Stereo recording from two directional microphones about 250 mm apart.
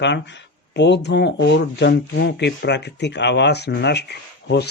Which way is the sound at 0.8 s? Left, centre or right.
Left.